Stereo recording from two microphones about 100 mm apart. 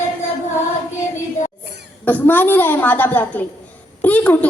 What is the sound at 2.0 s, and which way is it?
A woman's voice, 15° left (ahead or behind).